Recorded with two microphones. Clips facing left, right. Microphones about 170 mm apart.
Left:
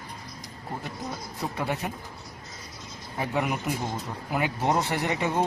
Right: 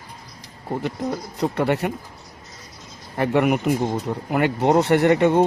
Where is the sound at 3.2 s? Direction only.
65° right (ahead or behind).